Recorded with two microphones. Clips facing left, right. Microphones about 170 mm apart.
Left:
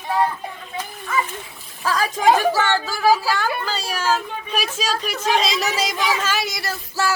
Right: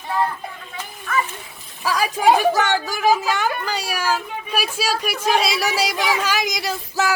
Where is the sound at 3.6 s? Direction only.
15° right (ahead or behind).